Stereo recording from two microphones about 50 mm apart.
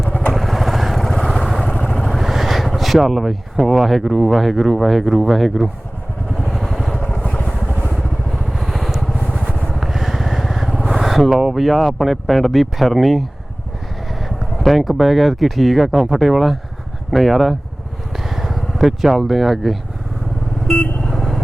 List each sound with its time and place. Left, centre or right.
0.3 s vehicle: centre
1.6 s vehicle: centre
2.0 s vehicle: centre
3.7 s speech: centre
6.5 s vehicle: centre
7.0 s vehicle: left
8.5 s vehicle: centre
11.3 s speech: centre
11.6 s speech: centre
18.1 s vehicle: centre
20.7 s vehicle: centre